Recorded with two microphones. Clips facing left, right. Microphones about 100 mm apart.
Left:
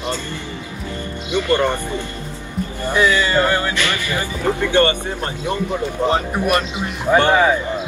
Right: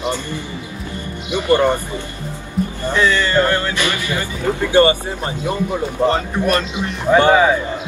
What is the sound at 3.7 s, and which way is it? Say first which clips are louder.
Speech: right 1 dB; 20° right (ahead or behind).